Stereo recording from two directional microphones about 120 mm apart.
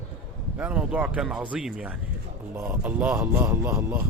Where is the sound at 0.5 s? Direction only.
10° right (ahead or behind).